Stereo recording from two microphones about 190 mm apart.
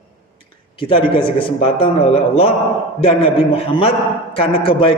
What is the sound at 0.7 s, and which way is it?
A man's voice, 30° left (ahead or behind).